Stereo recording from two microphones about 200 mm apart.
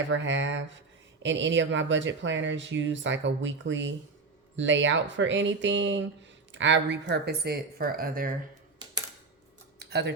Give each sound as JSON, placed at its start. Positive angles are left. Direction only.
{"t": 0.1, "sound": "speech", "side_deg": -65}
{"t": 9.7, "sound": "typing", "side_deg": -55}